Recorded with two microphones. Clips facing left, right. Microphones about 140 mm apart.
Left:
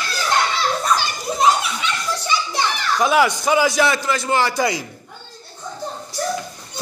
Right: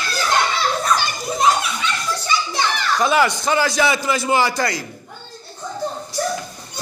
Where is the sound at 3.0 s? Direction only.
5° left (ahead or behind).